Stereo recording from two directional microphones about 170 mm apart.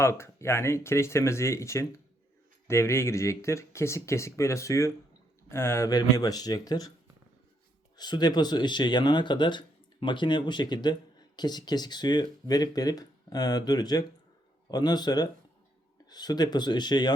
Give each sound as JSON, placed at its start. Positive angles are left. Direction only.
{"t": 0.0, "sound": "speech", "side_deg": 15}
{"t": 7.9, "sound": "speech", "side_deg": 25}